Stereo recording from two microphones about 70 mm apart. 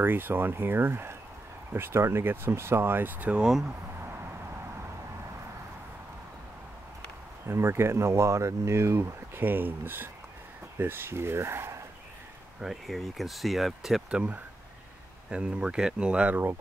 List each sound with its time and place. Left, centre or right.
0.0 s speech: right
3.3 s speech: centre
7.4 s speech: right
9.4 s speech: right
12.5 s speech: centre
14.1 s speech: centre